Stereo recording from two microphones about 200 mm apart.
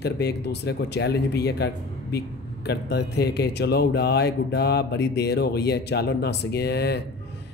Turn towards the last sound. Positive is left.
turn(degrees=55)  # may be behind; listen again after turning